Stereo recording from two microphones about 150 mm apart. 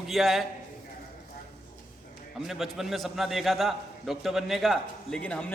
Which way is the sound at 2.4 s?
Centre (ahead or behind).